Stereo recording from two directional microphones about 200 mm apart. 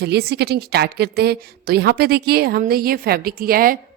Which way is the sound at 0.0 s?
55° right (ahead or behind).